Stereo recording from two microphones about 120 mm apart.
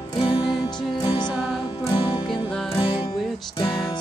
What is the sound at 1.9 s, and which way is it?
Music, 45° left (ahead or behind).